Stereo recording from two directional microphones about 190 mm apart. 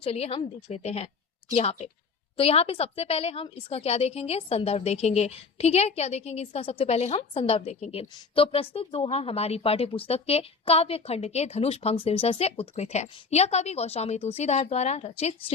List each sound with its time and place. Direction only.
0.0 s a woman's voice: 30° left (ahead or behind)